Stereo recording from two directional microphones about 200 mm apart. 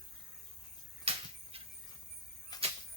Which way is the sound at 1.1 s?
30° right (ahead or behind).